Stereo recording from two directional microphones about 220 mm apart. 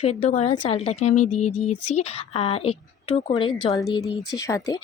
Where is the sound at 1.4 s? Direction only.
90° left.